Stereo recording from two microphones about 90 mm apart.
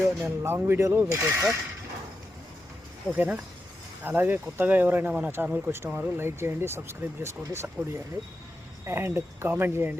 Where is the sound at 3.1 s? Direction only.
15° right (ahead or behind).